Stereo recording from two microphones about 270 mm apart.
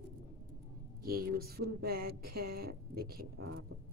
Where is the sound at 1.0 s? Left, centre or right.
Right.